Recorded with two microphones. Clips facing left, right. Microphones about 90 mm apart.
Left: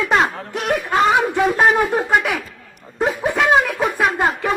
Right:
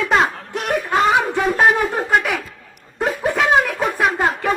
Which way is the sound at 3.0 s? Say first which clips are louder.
Left 1 dB; 15° left (ahead or behind).